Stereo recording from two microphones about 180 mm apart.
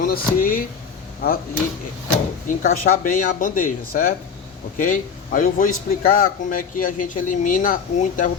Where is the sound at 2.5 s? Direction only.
50° left (ahead or behind).